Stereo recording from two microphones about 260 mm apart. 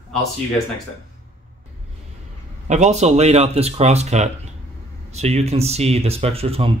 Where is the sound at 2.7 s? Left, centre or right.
Right.